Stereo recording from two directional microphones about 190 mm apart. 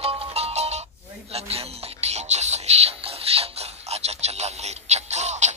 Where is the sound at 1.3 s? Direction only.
30° right (ahead or behind).